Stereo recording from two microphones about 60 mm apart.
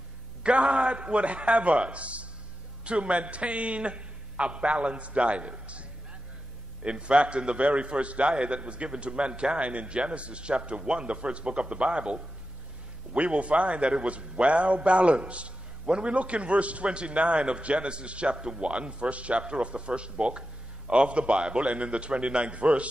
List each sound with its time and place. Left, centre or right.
0.4 s a man's voice: centre